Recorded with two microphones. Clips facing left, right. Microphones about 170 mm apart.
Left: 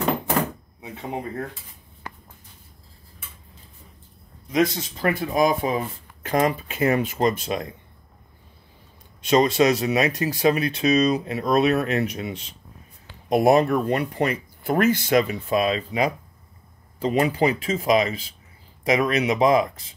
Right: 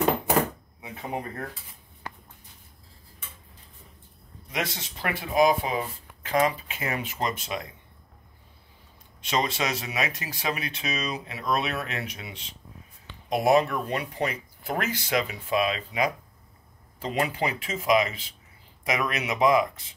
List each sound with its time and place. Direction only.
4.5 s speech: 40° left (ahead or behind)
9.2 s speech: 45° left (ahead or behind)